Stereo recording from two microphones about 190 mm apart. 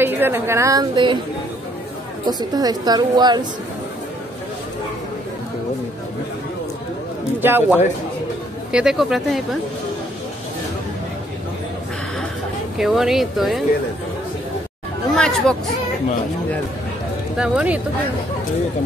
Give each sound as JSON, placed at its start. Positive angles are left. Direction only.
{"t": 0.0, "sound": "a woman's voice", "side_deg": -10}
{"t": 2.2, "sound": "a woman's voice", "side_deg": -20}
{"t": 7.4, "sound": "a woman's voice", "side_deg": -10}
{"t": 12.7, "sound": "speech", "side_deg": 0}
{"t": 15.1, "sound": "speech", "side_deg": 5}
{"t": 17.4, "sound": "speech", "side_deg": -5}